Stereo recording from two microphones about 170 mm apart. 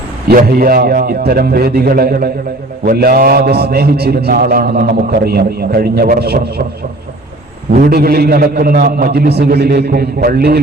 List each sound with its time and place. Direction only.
0.3 s a man's voice: 60° right (ahead or behind)
7.8 s a man's voice: 65° right (ahead or behind)